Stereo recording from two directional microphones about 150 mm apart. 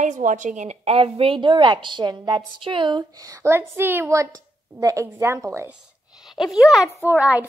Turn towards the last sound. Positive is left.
turn(degrees=-10)  # may be behind; listen again after turning